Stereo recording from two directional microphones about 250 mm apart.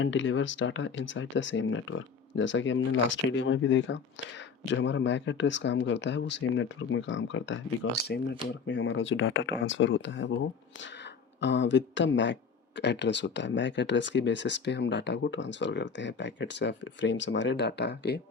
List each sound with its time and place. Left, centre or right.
0.0 s speech: left